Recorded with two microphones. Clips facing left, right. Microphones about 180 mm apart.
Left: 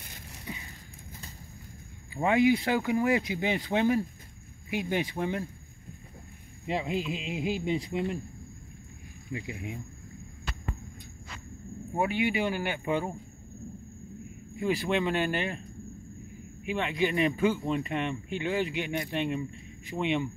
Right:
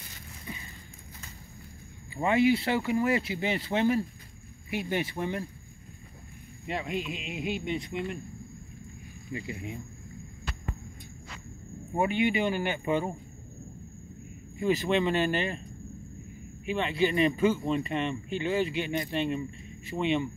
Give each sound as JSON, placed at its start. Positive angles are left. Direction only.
{"t": 2.2, "sound": "speech", "side_deg": 15}
{"t": 6.7, "sound": "speech", "side_deg": 25}
{"t": 9.3, "sound": "speech", "side_deg": 10}
{"t": 11.9, "sound": "speech", "side_deg": 5}
{"t": 14.6, "sound": "speech", "side_deg": 10}
{"t": 16.6, "sound": "speech", "side_deg": 10}